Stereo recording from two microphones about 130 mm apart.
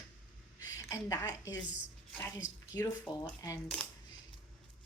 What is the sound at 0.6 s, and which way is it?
A woman's voice, 25° left (ahead or behind).